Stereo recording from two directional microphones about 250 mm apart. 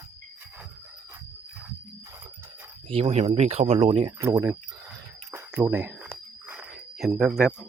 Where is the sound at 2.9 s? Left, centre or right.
Right.